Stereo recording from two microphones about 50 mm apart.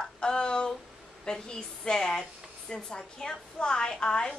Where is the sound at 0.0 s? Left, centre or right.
Centre.